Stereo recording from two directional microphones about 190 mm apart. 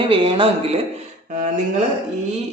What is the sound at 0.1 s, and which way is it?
Speech, 30° right (ahead or behind).